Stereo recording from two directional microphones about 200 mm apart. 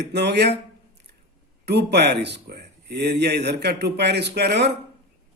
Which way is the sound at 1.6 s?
55° right (ahead or behind).